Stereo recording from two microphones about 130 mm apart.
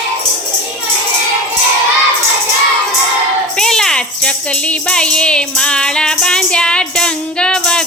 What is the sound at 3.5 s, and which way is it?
Music, 5° left (ahead or behind).